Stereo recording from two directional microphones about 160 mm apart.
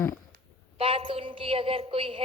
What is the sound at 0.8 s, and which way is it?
A woman's voice, 35° right (ahead or behind).